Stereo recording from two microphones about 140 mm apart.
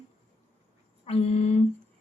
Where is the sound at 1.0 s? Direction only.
45° left (ahead or behind).